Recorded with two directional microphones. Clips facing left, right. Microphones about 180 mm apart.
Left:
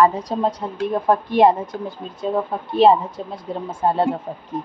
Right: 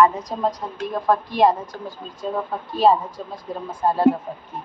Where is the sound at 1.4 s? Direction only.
20° left (ahead or behind).